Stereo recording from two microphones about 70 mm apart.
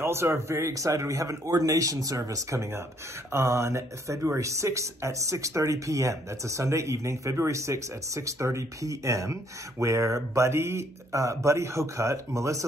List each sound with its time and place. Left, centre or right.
0.0 s speech: right